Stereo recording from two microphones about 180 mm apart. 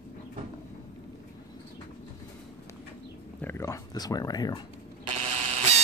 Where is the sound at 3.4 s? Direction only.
15° left (ahead or behind).